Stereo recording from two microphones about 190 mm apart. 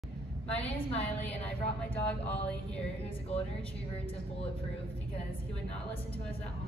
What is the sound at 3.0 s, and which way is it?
Speech, 30° left (ahead or behind).